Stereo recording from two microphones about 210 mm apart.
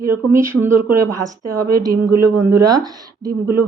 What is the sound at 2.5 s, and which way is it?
Speech, 20° right (ahead or behind).